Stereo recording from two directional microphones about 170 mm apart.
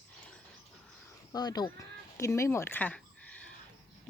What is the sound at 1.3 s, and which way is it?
Speech, 25° left (ahead or behind).